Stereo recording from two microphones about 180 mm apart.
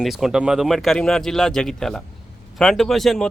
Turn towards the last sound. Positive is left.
turn(degrees=0)  # may be behind; listen again after turning